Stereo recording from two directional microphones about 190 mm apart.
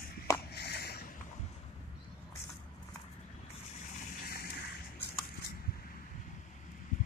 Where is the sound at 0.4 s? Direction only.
55° left (ahead or behind).